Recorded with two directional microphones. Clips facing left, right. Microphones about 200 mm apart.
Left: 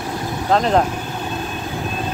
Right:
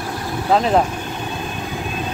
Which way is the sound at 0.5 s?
5° right (ahead or behind).